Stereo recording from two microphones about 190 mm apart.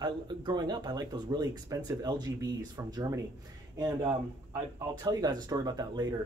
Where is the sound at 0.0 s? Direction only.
25° right (ahead or behind).